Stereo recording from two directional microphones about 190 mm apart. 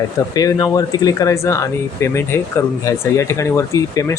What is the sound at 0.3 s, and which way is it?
Speech, 20° left (ahead or behind).